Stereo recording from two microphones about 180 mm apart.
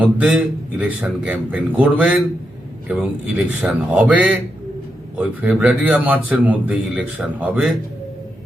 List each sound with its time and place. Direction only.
0.0 s a man's voice: 10° right (ahead or behind)